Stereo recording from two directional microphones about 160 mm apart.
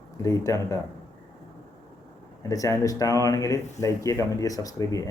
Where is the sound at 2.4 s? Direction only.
20° left (ahead or behind).